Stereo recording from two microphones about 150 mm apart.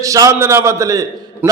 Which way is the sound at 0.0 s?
20° right (ahead or behind).